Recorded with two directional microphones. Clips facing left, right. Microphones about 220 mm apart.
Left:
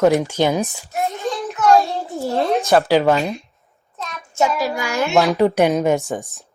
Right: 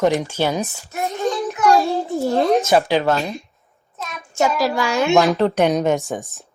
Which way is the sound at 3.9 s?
5° right (ahead or behind).